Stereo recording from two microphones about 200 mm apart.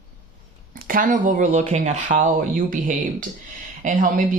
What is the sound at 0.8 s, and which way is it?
Speech, 40° right (ahead or behind).